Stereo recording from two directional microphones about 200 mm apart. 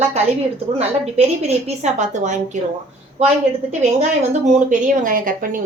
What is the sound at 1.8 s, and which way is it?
Speech, 35° right (ahead or behind).